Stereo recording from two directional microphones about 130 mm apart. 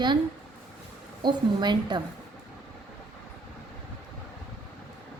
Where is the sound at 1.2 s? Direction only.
35° right (ahead or behind).